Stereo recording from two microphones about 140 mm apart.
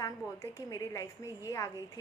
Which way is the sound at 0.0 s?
25° left (ahead or behind).